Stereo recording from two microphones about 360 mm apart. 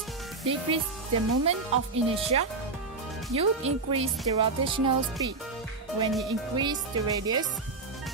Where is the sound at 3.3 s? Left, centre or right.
Centre.